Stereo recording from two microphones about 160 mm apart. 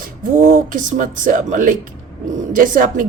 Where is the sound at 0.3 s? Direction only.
60° right (ahead or behind).